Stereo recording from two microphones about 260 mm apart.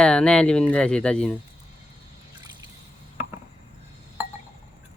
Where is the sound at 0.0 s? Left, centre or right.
Centre.